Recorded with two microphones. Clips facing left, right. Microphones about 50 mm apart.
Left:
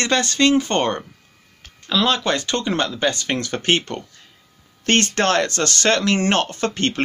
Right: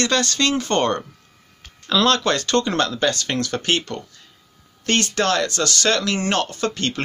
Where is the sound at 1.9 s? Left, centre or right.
Centre.